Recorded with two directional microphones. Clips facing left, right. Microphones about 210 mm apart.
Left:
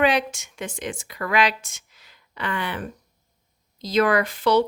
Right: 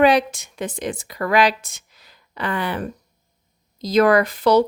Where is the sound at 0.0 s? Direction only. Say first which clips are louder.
Right 5 dB; 35° right (ahead or behind).